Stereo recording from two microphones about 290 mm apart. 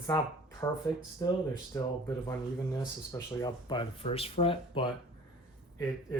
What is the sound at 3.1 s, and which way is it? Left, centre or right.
Speech, centre.